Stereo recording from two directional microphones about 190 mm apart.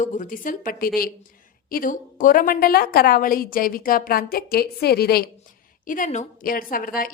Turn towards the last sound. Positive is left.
turn(degrees=50)  # may be behind; listen again after turning